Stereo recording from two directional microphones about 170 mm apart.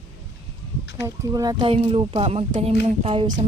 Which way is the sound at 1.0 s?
20° right (ahead or behind).